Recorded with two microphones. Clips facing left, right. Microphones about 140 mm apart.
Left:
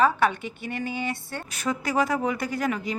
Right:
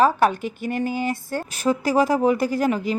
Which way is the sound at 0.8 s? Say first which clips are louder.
Right 5 dB; 40° right (ahead or behind).